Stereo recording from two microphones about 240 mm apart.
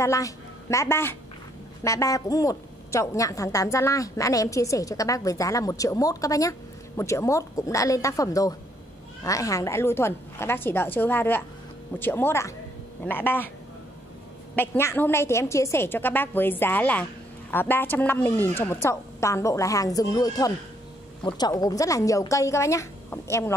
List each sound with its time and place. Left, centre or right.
0.0 s a man's voice: centre
14.5 s a woman's voice: centre